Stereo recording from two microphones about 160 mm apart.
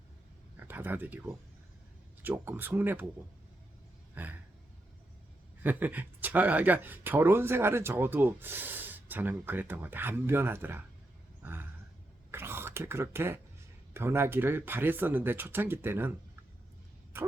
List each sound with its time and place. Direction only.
0.5 s speech: 10° right (ahead or behind)
4.1 s a sound: 10° right (ahead or behind)
5.6 s speech: 10° right (ahead or behind)
11.4 s roar: 15° right (ahead or behind)
12.3 s whispering: 15° right (ahead or behind)
13.9 s speech: 15° right (ahead or behind)